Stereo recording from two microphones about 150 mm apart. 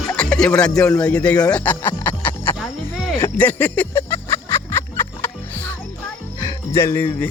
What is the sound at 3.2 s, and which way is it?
Music, 10° left (ahead or behind).